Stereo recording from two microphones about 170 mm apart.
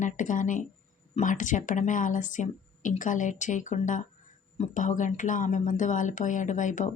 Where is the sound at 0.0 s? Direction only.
50° left (ahead or behind).